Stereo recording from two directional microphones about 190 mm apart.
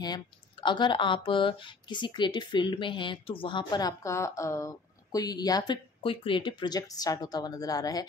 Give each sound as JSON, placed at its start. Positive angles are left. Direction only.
{"t": 0.0, "sound": "speech", "side_deg": 25}